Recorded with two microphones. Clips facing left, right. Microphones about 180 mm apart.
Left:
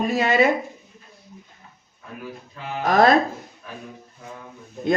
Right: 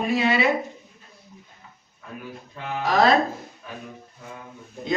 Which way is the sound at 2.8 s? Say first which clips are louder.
Left 3 dB; 50° left (ahead or behind).